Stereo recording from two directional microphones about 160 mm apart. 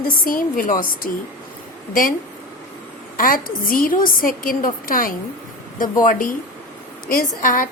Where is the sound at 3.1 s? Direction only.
60° left (ahead or behind).